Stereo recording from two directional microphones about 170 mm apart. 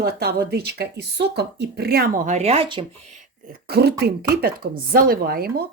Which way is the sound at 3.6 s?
70° right (ahead or behind).